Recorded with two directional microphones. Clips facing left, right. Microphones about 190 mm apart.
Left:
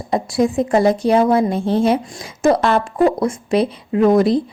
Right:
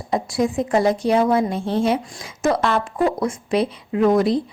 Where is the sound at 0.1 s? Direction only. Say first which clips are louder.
Left 3 dB; 30° left (ahead or behind).